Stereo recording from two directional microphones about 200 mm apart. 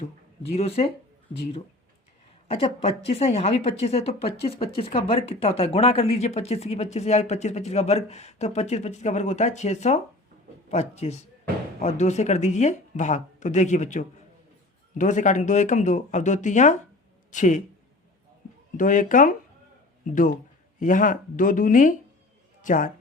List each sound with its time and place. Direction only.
0.5 s speech: 30° left (ahead or behind)
2.5 s speech: 30° left (ahead or behind)
18.8 s a man's voice: 40° left (ahead or behind)